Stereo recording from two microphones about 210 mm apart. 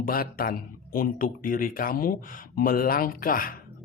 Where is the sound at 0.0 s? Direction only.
45° left (ahead or behind).